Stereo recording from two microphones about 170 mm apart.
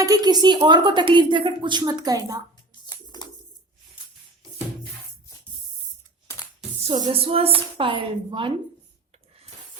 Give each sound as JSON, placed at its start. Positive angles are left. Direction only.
{"t": 0.0, "sound": "a woman's voice", "side_deg": -20}
{"t": 2.8, "sound": "bird", "side_deg": 25}
{"t": 7.1, "sound": "a woman's voice", "side_deg": -35}